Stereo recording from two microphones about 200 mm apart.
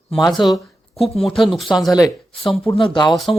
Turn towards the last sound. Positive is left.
turn(degrees=0)  # may be behind; listen again after turning